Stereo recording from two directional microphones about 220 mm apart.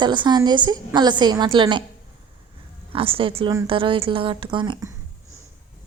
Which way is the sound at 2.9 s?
25° right (ahead or behind).